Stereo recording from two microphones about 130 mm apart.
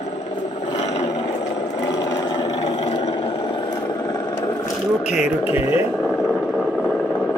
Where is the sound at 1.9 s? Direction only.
25° left (ahead or behind).